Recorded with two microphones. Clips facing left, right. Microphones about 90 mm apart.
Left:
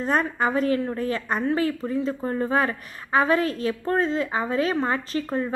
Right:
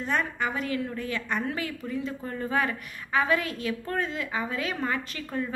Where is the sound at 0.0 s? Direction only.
40° left (ahead or behind).